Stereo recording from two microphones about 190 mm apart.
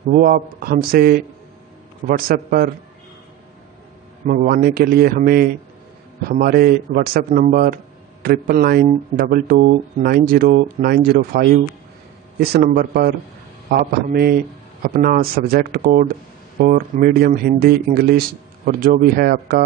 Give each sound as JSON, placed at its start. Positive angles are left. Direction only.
{"t": 0.1, "sound": "a man's voice", "side_deg": -50}
{"t": 4.3, "sound": "a man's voice", "side_deg": -50}